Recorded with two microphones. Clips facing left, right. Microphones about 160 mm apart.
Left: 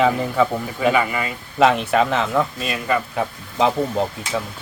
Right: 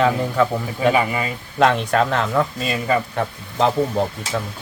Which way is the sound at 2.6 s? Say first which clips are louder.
Right 2 dB; 30° right (ahead or behind).